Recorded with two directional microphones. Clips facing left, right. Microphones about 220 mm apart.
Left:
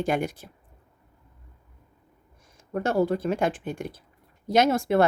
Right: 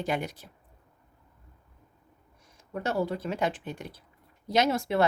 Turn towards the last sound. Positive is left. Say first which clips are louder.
# left 5 dB
turn(degrees=50)  # may be behind; listen again after turning